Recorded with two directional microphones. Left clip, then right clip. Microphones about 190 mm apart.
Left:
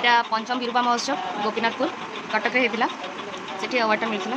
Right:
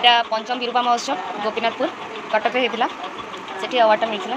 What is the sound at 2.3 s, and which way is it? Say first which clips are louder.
Speech: right 3 dB; 10° left (ahead or behind).